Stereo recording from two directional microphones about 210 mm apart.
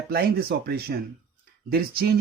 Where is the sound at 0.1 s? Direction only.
50° right (ahead or behind).